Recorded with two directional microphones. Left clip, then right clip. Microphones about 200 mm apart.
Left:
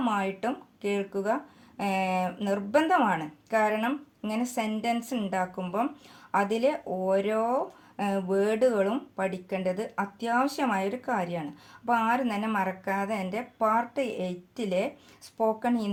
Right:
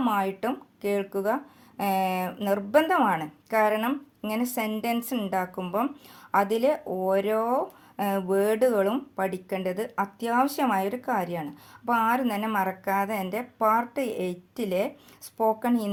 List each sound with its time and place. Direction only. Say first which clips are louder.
0.0 s speech: right 2 dB; 25° right (ahead or behind)